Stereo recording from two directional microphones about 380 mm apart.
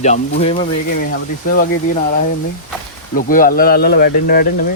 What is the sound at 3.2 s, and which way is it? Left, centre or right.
Speech, left.